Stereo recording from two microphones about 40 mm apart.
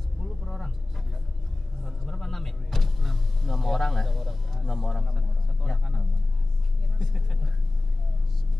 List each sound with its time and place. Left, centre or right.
0.2 s vehicle: centre
1.8 s power windows: centre
7.0 s speech: centre